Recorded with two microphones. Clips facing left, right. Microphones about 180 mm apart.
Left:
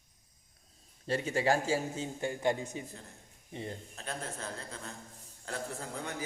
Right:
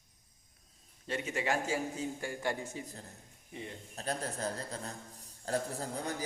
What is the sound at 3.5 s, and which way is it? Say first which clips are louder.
Speech: left 4 dB; 35° left (ahead or behind).